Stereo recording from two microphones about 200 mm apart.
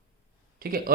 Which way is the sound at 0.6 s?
50° right (ahead or behind).